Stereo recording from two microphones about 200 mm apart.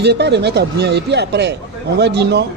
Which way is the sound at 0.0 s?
55° right (ahead or behind).